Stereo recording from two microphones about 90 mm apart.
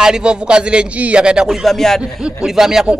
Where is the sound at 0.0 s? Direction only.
10° right (ahead or behind).